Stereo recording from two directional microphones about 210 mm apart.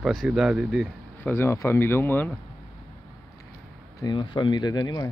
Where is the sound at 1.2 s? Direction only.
10° left (ahead or behind).